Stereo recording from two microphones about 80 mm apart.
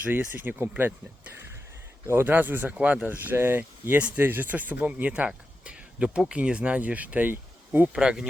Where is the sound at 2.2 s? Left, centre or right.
Right.